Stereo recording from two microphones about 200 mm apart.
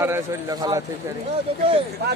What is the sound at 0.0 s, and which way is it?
A man's voice, 10° right (ahead or behind).